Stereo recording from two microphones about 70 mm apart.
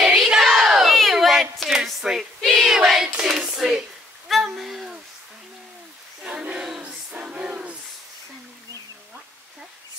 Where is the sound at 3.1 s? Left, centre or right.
Centre.